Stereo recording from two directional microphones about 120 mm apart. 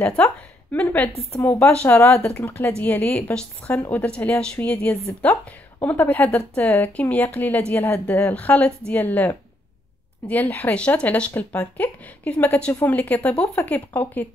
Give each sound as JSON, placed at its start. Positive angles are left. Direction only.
{"t": 0.0, "sound": "speech", "side_deg": 10}
{"t": 1.7, "sound": "speech", "side_deg": 10}
{"t": 4.0, "sound": "speech", "side_deg": 10}